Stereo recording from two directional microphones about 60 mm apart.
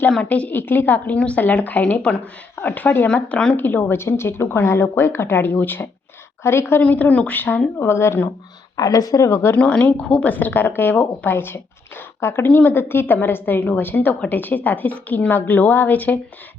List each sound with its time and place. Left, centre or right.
0.2 s a woman's voice: left
2.6 s speech: left
3.2 s a woman's voice: centre
3.5 s speech: left
3.9 s speech: left
6.8 s a woman's voice: left
7.8 s speech: left
8.7 s speech: left
9.6 s a woman's voice: left
10.2 s a woman's voice: left